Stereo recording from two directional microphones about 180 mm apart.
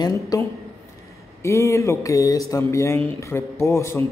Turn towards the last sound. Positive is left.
turn(degrees=15)  # may be behind; listen again after turning